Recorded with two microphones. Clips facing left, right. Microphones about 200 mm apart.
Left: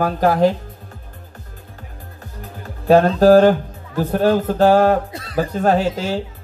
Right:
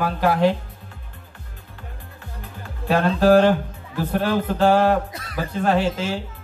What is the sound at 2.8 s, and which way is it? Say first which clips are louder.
Speech: left 5 dB; 40° left (ahead or behind).